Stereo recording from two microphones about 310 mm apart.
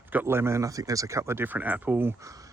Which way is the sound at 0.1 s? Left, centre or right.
Centre.